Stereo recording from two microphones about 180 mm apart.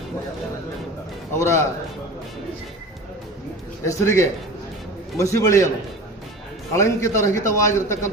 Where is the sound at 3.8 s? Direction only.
15° left (ahead or behind).